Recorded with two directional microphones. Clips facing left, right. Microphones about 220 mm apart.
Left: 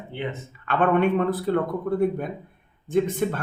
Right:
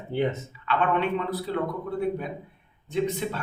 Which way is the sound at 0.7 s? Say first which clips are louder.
Left 5 dB; 50° left (ahead or behind).